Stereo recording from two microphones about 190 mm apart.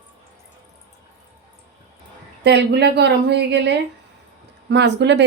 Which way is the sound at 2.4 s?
60° right (ahead or behind).